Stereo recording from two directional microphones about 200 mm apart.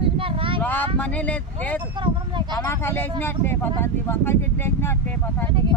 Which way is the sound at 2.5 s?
10° left (ahead or behind).